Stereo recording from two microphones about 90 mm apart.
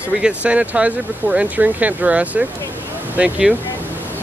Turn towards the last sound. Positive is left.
turn(degrees=-15)  # may be behind; listen again after turning